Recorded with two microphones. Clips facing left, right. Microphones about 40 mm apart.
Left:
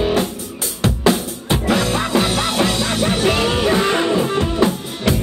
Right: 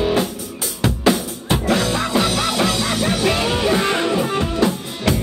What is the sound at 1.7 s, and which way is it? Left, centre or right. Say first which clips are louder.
Music: left 2 dB; left.